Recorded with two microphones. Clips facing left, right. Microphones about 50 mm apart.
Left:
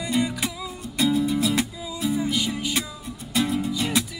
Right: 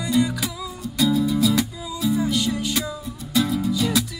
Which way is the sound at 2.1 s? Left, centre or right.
Centre.